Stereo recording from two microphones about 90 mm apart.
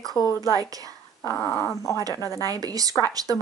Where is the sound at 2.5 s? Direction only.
45° right (ahead or behind).